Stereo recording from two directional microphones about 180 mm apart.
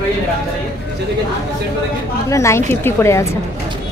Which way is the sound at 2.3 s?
15° left (ahead or behind).